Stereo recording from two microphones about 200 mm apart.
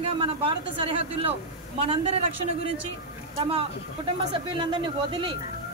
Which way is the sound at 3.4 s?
30° right (ahead or behind).